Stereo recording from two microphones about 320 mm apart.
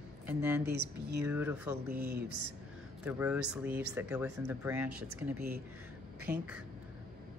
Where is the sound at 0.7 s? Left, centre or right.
Right.